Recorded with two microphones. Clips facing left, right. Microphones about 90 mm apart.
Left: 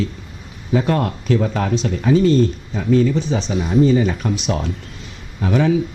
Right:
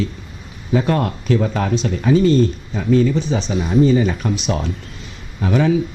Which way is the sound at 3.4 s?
20° right (ahead or behind).